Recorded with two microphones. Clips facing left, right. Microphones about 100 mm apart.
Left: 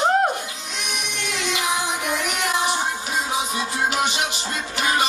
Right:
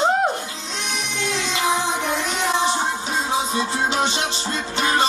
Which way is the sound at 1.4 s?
25° right (ahead or behind).